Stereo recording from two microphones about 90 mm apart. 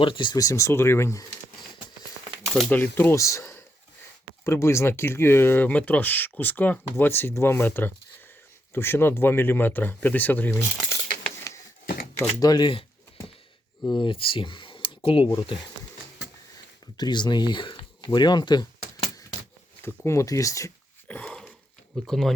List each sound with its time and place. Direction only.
0.0 s speech: 65° left (ahead or behind)
0.3 s speech: 35° left (ahead or behind)
2.4 s crumpling: 5° left (ahead or behind)
2.6 s speech: 20° left (ahead or behind)
12.4 s speech: 50° left (ahead or behind)
13.8 s speech: 65° left (ahead or behind); by 15.4 s 85° left
16.8 s speech: 55° left (ahead or behind)
20.1 s speech: 35° left (ahead or behind)
21.1 s dog: 15° left (ahead or behind)
22.0 s speech: 5° left (ahead or behind)